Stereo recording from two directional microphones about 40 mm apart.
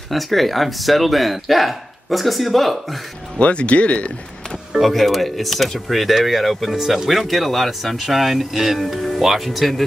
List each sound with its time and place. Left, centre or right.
0.1 s speech: centre
3.3 s speech: left
4.7 s speech: centre
6.8 s speech: centre